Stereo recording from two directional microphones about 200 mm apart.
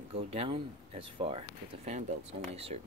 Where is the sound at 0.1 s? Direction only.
30° right (ahead or behind).